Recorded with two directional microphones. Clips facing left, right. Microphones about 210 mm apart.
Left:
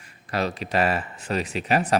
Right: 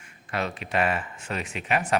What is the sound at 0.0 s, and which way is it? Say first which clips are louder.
Speech: left 4 dB; 35° left (ahead or behind).